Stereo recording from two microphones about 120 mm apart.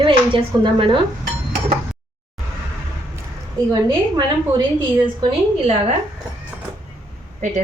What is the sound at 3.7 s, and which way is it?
Speech, 35° right (ahead or behind).